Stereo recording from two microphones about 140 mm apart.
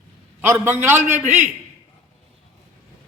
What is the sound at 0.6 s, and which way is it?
Speech, 15° right (ahead or behind).